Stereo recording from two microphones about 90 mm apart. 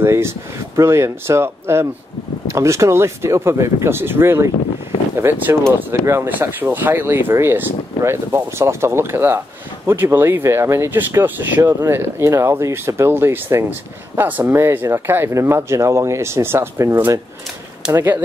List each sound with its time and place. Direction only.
0.0 s speech: 30° right (ahead or behind)